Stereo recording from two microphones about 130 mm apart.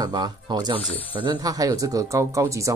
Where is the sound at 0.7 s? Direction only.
10° left (ahead or behind).